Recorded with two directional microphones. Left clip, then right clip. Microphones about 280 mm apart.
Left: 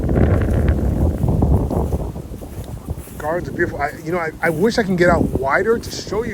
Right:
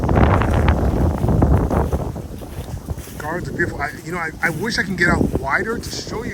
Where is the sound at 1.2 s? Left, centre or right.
Left.